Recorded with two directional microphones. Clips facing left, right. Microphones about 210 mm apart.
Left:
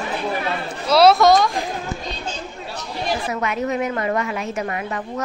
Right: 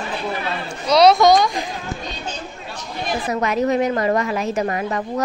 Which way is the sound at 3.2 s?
35° right (ahead or behind).